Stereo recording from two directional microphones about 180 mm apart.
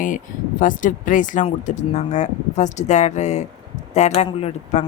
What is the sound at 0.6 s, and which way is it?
Speech, 45° left (ahead or behind).